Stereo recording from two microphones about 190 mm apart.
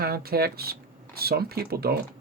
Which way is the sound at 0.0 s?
55° right (ahead or behind).